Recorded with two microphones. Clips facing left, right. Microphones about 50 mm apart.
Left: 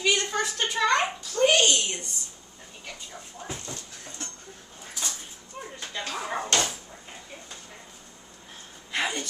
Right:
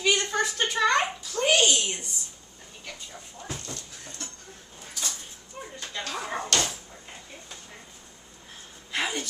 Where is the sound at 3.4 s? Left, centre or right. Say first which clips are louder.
Even; centre.